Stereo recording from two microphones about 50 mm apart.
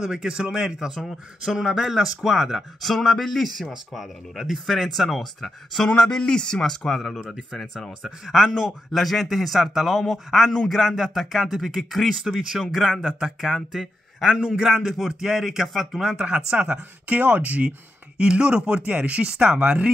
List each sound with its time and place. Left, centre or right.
0.0 s a man's voice: centre
2.9 s a man's voice: centre
16.2 s speech: centre
17.1 s speech: right